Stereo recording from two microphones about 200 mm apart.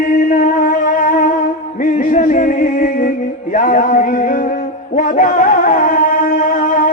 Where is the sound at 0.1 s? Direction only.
40° left (ahead or behind).